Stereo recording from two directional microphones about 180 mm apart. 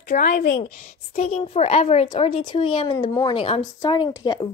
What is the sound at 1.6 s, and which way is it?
Speech, 35° left (ahead or behind).